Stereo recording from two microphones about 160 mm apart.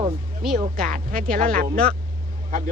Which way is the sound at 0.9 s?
60° right (ahead or behind).